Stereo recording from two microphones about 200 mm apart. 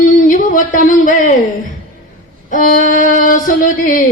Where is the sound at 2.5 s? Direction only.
40° left (ahead or behind).